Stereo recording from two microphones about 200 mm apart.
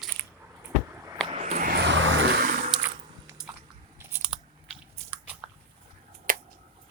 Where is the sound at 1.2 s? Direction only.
35° right (ahead or behind); by 2.4 s 60° right (ahead or behind).